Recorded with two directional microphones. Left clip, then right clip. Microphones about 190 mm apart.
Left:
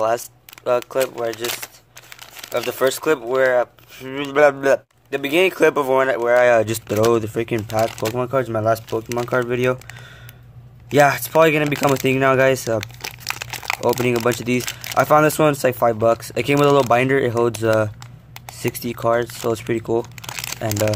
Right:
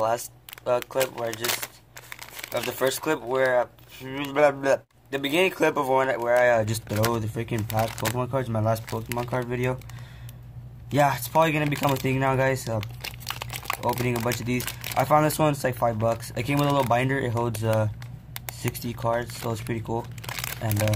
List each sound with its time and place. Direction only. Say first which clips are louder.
0.0 s speech: left 5 dB; 40° left (ahead or behind)
2.8 s speech: left 7 dB; 45° left (ahead or behind)
10.9 s speech: left 8 dB; 45° left (ahead or behind)
12.8 s crumpling: left 7 dB; 10° left (ahead or behind)
13.7 s speech: left 9 dB; 45° left (ahead or behind)